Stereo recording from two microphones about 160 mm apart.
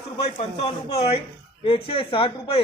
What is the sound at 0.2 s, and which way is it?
Speech, 40° left (ahead or behind).